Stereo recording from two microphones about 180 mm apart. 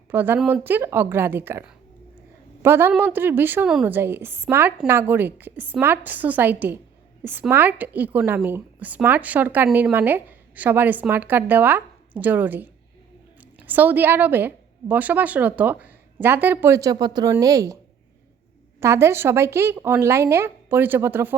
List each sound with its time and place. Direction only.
0.1 s a woman's voice: 10° right (ahead or behind)
18.8 s a woman's voice: 15° right (ahead or behind)